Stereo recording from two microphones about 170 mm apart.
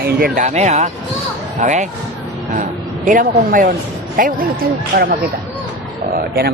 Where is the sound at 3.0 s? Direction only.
50° right (ahead or behind).